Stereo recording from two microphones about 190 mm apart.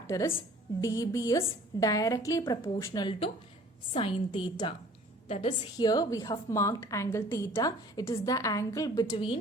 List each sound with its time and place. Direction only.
0.1 s a woman's voice: 20° left (ahead or behind)